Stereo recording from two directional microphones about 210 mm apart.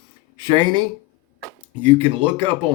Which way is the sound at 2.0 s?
25° right (ahead or behind).